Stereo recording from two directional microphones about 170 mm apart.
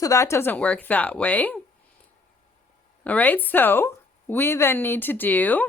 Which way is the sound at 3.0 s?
10° left (ahead or behind).